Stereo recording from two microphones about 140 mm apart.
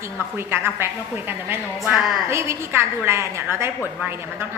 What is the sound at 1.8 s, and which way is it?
Speech, centre (ahead or behind).